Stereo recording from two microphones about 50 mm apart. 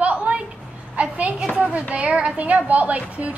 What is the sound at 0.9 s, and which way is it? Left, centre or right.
A woman's voice, right.